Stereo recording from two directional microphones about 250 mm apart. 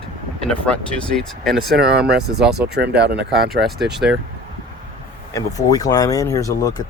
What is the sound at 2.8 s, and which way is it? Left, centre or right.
Speech, right.